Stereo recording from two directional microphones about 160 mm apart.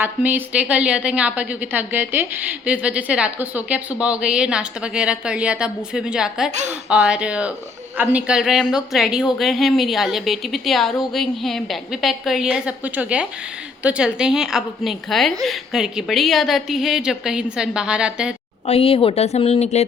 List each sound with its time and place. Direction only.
0.0 s a woman's voice: 10° right (ahead or behind)
6.5 s a woman's voice: 45° right (ahead or behind)
6.8 s a woman's voice: 5° right (ahead or behind)
18.6 s speech: 35° left (ahead or behind)